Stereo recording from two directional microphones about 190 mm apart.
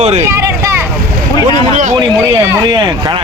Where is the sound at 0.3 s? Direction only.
15° right (ahead or behind).